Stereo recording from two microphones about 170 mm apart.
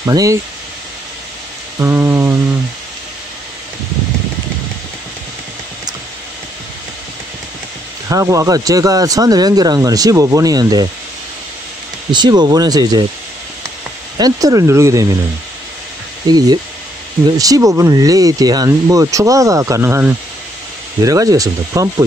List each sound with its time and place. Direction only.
0.0 s speech: 20° right (ahead or behind)
1.8 s rain on surface: 15° right (ahead or behind)
8.1 s speech: 20° right (ahead or behind)
12.1 s speech: 25° right (ahead or behind)
14.1 s speech: 20° right (ahead or behind)
16.3 s speech: 25° right (ahead or behind)